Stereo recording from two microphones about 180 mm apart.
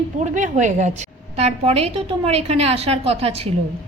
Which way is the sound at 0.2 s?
40° right (ahead or behind).